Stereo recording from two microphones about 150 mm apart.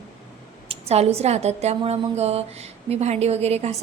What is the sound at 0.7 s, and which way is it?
A woman's voice, 45° right (ahead or behind).